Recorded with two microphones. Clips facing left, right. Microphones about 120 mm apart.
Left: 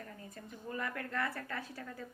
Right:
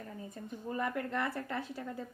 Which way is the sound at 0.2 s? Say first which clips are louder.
Right 5 dB; 20° right (ahead or behind).